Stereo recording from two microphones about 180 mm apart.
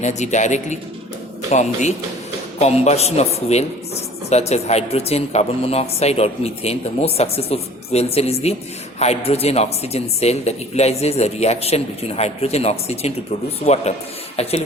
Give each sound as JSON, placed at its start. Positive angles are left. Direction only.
{"t": 0.0, "sound": "speech", "side_deg": 40}
{"t": 14.4, "sound": "speech", "side_deg": 35}